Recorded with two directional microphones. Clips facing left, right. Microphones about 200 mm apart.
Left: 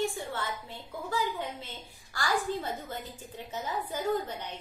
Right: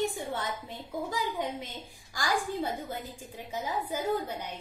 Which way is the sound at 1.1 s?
15° right (ahead or behind).